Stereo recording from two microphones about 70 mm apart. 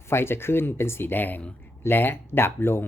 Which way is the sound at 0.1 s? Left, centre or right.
Left.